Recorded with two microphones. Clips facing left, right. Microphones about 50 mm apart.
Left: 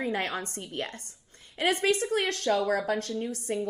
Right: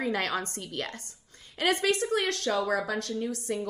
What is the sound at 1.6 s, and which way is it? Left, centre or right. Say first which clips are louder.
Speech: even; left.